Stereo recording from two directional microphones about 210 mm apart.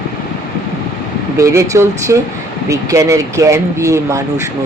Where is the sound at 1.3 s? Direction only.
15° right (ahead or behind).